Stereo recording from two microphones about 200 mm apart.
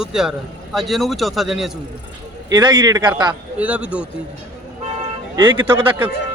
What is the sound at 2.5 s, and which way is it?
Speech, 20° right (ahead or behind).